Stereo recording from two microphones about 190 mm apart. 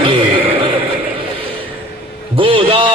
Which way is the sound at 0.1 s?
25° right (ahead or behind).